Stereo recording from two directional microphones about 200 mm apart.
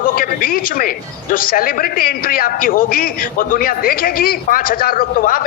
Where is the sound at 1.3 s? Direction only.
45° left (ahead or behind).